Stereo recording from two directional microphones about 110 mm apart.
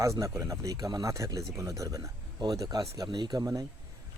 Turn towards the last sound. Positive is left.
turn(degrees=-35)  # may be behind; listen again after turning